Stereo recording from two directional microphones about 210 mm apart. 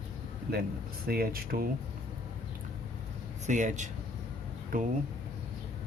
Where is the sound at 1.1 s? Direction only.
45° right (ahead or behind).